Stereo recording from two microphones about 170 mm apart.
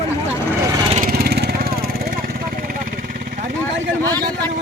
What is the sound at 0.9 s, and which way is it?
Vehicle, 60° right (ahead or behind).